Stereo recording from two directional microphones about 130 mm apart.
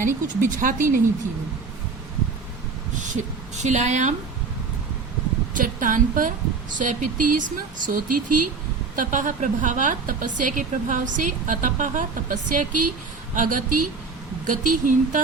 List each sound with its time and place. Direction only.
0.3 s a woman's voice: 80° right
3.0 s a woman's voice: 65° right (ahead or behind)
5.5 s a woman's voice: 90° right